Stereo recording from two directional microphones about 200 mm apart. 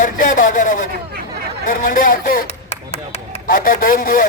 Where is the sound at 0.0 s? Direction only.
40° left (ahead or behind).